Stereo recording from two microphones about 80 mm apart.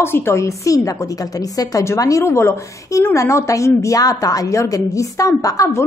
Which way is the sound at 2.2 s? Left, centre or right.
Left.